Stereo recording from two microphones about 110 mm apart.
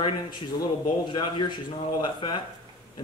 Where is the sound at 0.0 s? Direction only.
45° left (ahead or behind).